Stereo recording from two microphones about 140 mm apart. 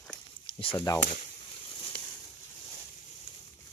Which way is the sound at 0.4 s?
40° left (ahead or behind).